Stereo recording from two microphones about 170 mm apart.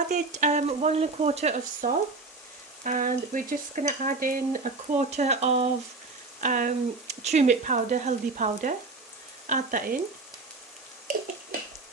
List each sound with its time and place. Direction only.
0.1 s frying: 45° right (ahead or behind)
2.8 s stir: 50° right (ahead or behind)
6.4 s stir: 50° right (ahead or behind)